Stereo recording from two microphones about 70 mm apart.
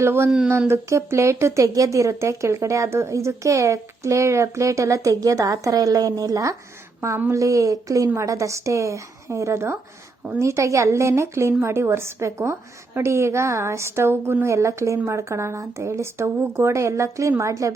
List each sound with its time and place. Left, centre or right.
0.0 s a woman's voice: right